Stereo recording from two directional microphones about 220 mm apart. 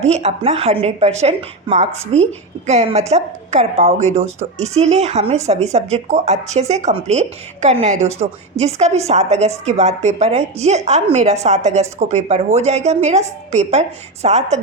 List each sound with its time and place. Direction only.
0.0 s a woman's voice: 30° right (ahead or behind)